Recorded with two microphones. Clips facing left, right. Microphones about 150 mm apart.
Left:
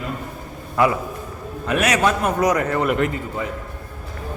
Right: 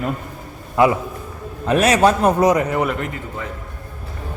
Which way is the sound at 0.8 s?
25° right (ahead or behind).